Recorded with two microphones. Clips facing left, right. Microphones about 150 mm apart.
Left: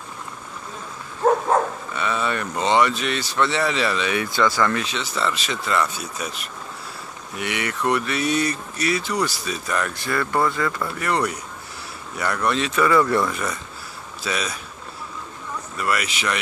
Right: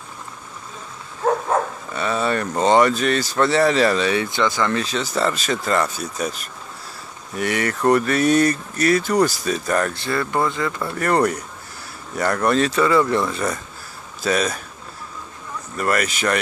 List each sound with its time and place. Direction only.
2.0 s speech: 35° right (ahead or behind); by 4.7 s 20° right (ahead or behind)
4.7 s speech: 40° right (ahead or behind)
9.9 s speech: 30° right (ahead or behind)
11.0 s speech: 45° right (ahead or behind)
12.7 s speech: 25° right (ahead or behind)
14.2 s speech: 45° right (ahead or behind)
15.8 s speech: 45° right (ahead or behind)